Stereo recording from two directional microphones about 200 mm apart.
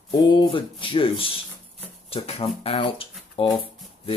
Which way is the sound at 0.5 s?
25° left (ahead or behind).